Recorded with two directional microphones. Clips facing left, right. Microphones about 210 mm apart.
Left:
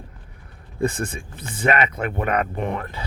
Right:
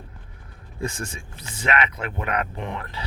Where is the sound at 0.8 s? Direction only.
55° left (ahead or behind).